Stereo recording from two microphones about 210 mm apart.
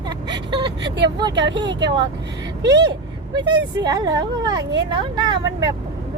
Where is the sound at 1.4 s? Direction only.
60° right (ahead or behind).